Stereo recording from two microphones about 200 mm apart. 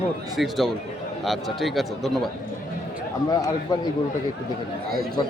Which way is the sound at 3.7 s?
20° left (ahead or behind).